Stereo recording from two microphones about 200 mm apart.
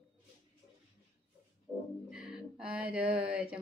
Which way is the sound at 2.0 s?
5° right (ahead or behind).